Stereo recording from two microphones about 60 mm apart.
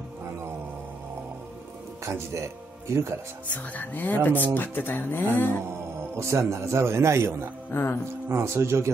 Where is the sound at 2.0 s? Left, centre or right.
Right.